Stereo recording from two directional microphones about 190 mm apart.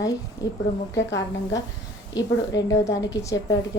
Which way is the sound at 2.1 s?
20° left (ahead or behind).